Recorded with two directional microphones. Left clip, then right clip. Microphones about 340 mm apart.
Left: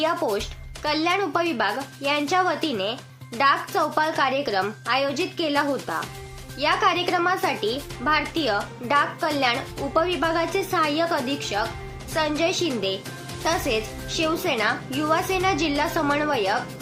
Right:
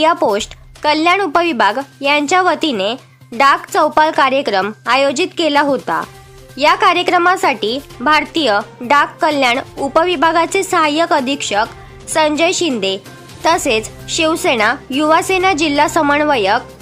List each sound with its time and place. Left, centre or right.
0.0 s a woman's voice: right